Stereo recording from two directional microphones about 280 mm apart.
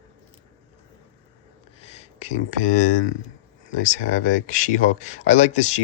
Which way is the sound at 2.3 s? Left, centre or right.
Left.